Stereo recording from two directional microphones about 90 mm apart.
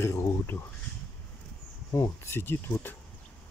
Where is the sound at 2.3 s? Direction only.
25° left (ahead or behind).